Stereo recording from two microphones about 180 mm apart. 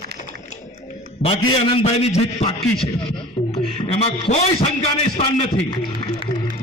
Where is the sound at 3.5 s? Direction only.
35° left (ahead or behind).